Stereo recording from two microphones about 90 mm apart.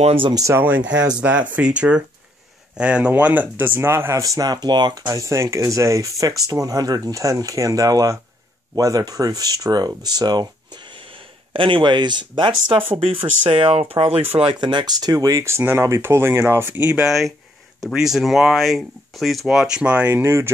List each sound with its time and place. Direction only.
0.3 s speech: 40° right (ahead or behind)
0.6 s speech: 15° right (ahead or behind)
4.2 s speech: 45° right (ahead or behind)
5.0 s speech: 35° right (ahead or behind); by 12.8 s 65° right (ahead or behind)
12.9 s speech: 90° right
14.5 s speech: 60° right (ahead or behind); by 17.0 s 20° right (ahead or behind)
17.0 s speech: 5° right (ahead or behind)
20.2 s speech: 30° right (ahead or behind)